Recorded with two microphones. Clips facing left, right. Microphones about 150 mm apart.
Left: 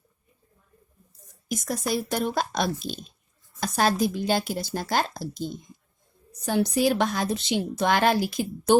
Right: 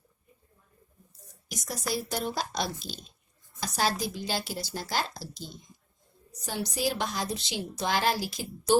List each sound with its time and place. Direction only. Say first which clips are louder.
1.5 s a woman's voice: left 6 dB; 50° left (ahead or behind)